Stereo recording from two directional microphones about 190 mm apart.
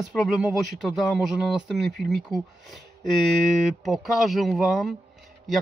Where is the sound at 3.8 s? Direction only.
Centre (ahead or behind).